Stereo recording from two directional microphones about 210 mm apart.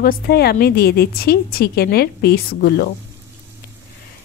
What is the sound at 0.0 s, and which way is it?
A woman's voice, 45° left (ahead or behind).